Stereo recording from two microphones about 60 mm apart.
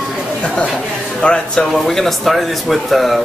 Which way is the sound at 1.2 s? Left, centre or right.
Centre.